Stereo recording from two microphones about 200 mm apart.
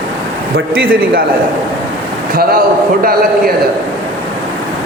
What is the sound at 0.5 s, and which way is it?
Speech, 50° right (ahead or behind).